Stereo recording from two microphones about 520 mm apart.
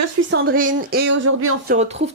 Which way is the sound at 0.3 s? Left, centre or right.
Centre.